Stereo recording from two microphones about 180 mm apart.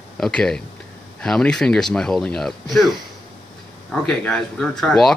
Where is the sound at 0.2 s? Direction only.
5° left (ahead or behind).